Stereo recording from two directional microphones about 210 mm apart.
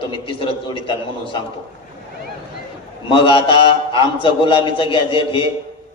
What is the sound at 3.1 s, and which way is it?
A man's voice, 25° left (ahead or behind).